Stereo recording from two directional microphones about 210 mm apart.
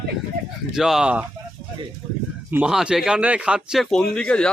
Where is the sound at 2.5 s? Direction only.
5° right (ahead or behind).